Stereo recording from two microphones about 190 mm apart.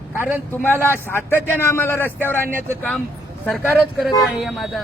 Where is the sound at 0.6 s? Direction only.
10° left (ahead or behind).